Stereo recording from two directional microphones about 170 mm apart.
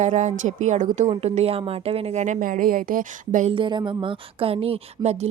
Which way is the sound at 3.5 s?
25° right (ahead or behind).